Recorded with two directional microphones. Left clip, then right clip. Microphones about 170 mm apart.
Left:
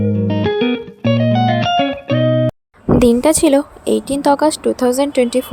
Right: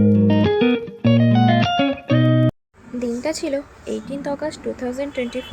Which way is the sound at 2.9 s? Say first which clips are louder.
Left 12 dB; 50° left (ahead or behind).